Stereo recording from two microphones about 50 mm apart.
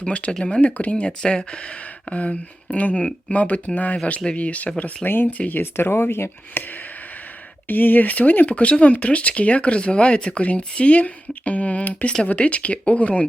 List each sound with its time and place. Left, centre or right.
0.0 s speech: left
0.6 s speech: left
3.0 s speech: centre
3.3 s speech: left
5.0 s speech: left
5.7 s speech: left
6.6 s speech: left